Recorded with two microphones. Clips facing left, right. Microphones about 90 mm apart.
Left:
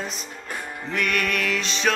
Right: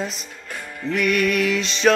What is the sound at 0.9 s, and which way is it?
Music, 15° right (ahead or behind).